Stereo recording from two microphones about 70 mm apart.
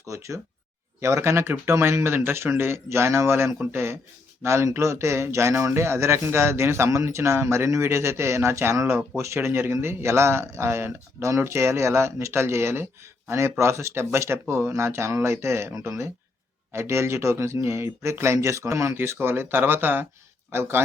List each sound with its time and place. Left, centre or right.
0.1 s speech: right
18.9 s speech: right